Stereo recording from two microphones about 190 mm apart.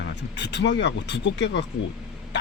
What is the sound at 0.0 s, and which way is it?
Speech, 65° left (ahead or behind).